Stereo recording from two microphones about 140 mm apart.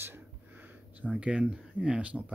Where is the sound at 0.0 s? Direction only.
15° right (ahead or behind).